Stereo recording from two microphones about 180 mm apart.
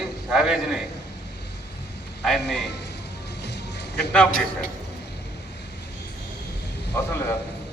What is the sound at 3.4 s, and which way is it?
Music, 70° left (ahead or behind).